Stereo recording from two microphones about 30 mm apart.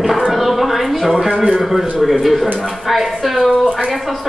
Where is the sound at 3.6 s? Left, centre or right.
Centre.